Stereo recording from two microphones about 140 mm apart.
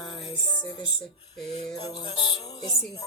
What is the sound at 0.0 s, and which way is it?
Music, 35° left (ahead or behind).